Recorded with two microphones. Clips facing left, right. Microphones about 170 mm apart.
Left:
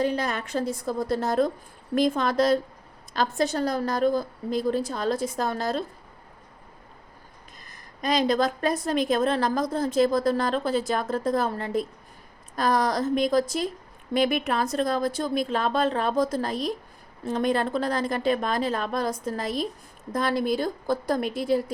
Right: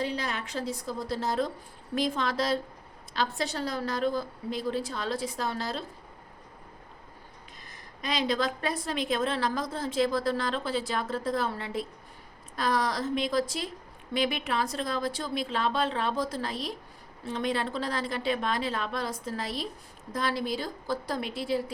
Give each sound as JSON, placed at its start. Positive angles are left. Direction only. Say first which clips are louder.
{"t": 0.0, "sound": "a woman's voice", "louder": "left 6 dB", "side_deg": 50}
{"t": 7.7, "sound": "a woman's voice", "louder": "left 7 dB", "side_deg": 45}